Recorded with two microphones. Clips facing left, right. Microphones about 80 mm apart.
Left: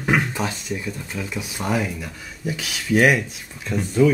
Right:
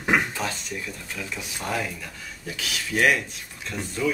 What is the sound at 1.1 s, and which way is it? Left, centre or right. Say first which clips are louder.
Speech: left 5 dB; centre.